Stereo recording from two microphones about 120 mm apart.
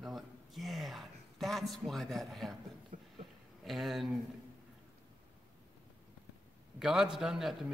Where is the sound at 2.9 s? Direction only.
90° right.